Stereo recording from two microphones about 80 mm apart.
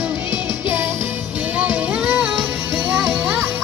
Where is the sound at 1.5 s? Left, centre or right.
Centre.